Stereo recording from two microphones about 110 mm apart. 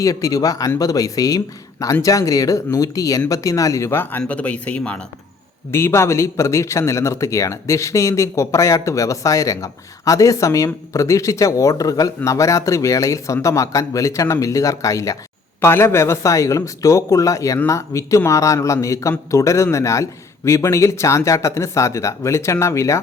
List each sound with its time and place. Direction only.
0.0 s speech: 30° left (ahead or behind); by 5.0 s 10° left (ahead or behind)
5.7 s speech: 25° left (ahead or behind)